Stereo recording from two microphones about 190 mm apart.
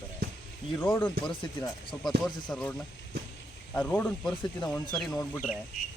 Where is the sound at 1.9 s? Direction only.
20° left (ahead or behind).